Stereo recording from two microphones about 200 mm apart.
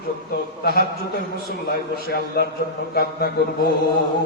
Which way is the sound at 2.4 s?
55° left (ahead or behind).